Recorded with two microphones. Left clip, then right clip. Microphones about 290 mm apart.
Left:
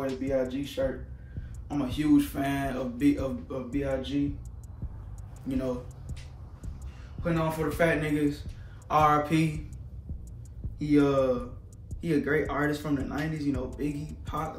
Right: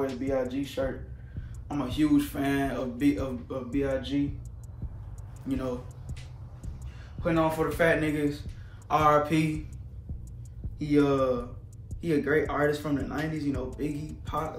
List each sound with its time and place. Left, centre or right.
0.0 s speech: centre
0.3 s speech: centre
1.7 s speech: centre
5.5 s speech: centre
7.3 s speech: centre
10.8 s speech: centre